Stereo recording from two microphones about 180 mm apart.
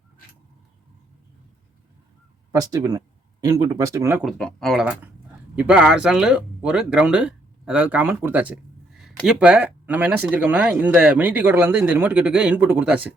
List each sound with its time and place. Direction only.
2.5 s speech: 20° right (ahead or behind)
4.3 s speech: centre (ahead or behind)